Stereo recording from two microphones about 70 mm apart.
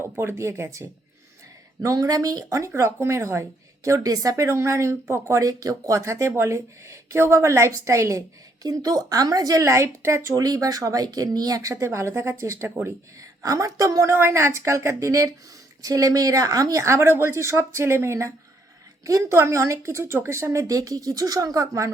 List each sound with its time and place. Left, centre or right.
0.0 s speech: right
1.8 s speech: right
8.6 s speech: right
11.7 s speech: right
13.1 s speech: right
14.1 s speech: right
19.3 s speech: right